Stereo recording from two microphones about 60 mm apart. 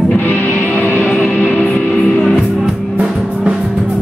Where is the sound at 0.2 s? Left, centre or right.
Left.